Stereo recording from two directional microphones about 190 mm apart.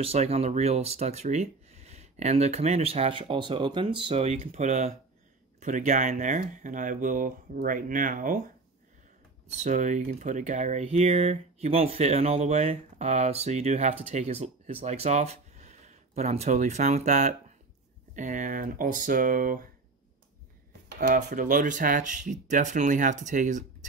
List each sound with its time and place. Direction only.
0.0 s speech: 30° right (ahead or behind)
9.6 s speech: 40° right (ahead or behind)
20.9 s speech: 60° right (ahead or behind)
21.3 s speech: 45° right (ahead or behind)